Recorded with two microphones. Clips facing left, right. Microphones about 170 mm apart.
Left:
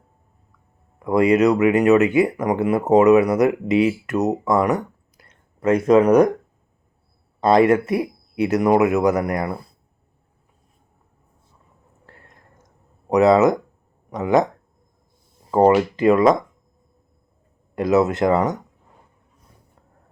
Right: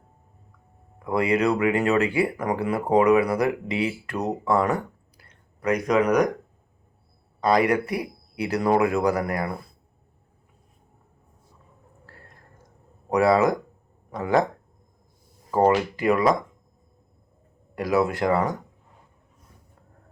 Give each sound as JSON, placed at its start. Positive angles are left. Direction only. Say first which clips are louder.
{"t": 1.0, "sound": "speech", "louder": "left 6 dB", "side_deg": 20}
{"t": 7.4, "sound": "speech", "louder": "left 6 dB", "side_deg": 25}
{"t": 12.0, "sound": "whispering", "louder": "left 2 dB", "side_deg": 20}
{"t": 13.1, "sound": "speech", "louder": "left 5 dB", "side_deg": 20}
{"t": 15.4, "sound": "speech", "louder": "left 5 dB", "side_deg": 25}
{"t": 17.7, "sound": "speech", "louder": "left 5 dB", "side_deg": 20}